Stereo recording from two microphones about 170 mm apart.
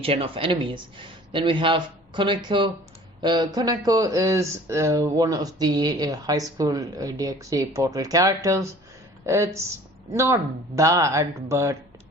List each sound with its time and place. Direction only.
0.0 s speech: 35° right (ahead or behind); by 11.8 s 15° right (ahead or behind)